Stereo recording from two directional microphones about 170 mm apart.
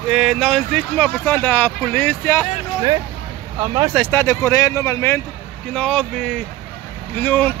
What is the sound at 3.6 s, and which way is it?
Speech, 20° right (ahead or behind).